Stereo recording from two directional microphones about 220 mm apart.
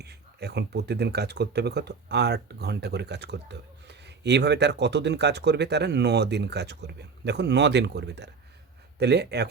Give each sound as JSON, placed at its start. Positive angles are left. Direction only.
{"t": 0.0, "sound": "speech", "side_deg": -50}